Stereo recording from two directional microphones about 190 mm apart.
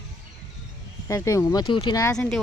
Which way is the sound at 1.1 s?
15° left (ahead or behind).